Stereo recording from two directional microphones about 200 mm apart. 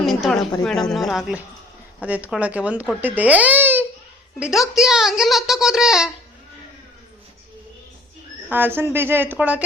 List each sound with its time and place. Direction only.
0.0 s a sound: centre (ahead or behind)
0.6 s a child's voice: 5° left (ahead or behind)
8.4 s speech: 10° right (ahead or behind)